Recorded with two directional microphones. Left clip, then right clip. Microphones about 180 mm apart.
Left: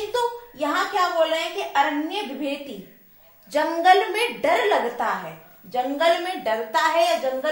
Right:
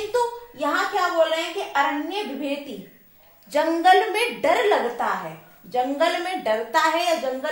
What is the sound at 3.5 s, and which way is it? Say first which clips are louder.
A woman's voice: even; 10° right (ahead or behind).